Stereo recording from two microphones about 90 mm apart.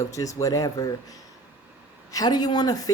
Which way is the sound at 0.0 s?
35° left (ahead or behind).